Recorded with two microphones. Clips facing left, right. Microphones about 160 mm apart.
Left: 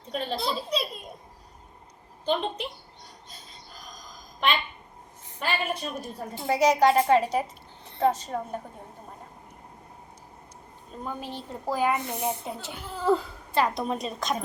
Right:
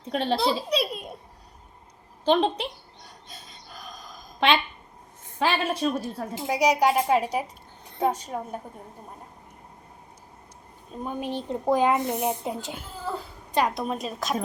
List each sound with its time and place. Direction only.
0.1 s a child's voice: 80° right
2.2 s a woman's voice: 85° right
4.4 s a woman's voice: 90° right
6.5 s a woman's voice: 15° right (ahead or behind)
11.0 s a woman's voice: 20° right (ahead or behind)
13.7 s a woman's voice: centre (ahead or behind)